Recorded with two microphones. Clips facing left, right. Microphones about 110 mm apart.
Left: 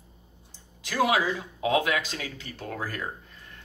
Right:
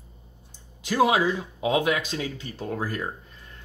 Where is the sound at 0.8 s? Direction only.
25° right (ahead or behind).